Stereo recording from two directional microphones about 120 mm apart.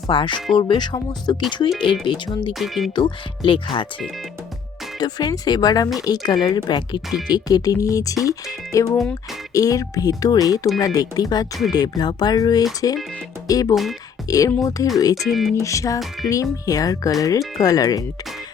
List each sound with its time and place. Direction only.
0.1 s speech: 40° left (ahead or behind)
2.5 s speech: centre (ahead or behind)
2.9 s speech: 40° left (ahead or behind)
4.9 s speech: 35° left (ahead or behind)
15.2 s speech: centre (ahead or behind)
15.6 s speech: 25° left (ahead or behind)